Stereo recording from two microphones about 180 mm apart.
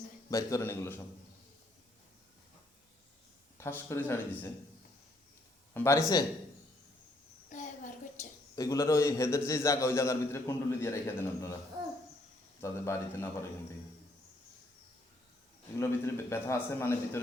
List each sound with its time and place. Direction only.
0.3 s a man's voice: 15° left (ahead or behind)
3.6 s a man's voice: 10° left (ahead or behind)
5.7 s a man's voice: 15° left (ahead or behind)
7.5 s a sound: 45° left (ahead or behind)
8.5 s a man's voice: 20° left (ahead or behind)
12.6 s a man's voice: 15° left (ahead or behind)
15.8 s a man's voice: 15° left (ahead or behind)